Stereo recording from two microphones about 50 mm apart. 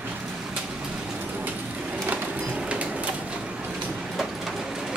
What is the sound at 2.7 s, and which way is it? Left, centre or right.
Bird, right.